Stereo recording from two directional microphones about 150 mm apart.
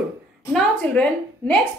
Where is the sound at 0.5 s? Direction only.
5° left (ahead or behind).